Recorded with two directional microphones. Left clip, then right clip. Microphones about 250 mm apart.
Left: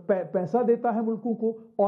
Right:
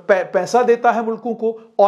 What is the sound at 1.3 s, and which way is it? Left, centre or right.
Speech, right.